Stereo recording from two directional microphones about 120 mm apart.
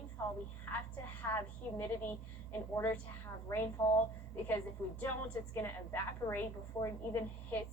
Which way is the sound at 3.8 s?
50° left (ahead or behind).